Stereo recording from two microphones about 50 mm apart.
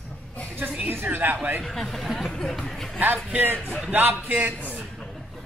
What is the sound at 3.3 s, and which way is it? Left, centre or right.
Speech, right.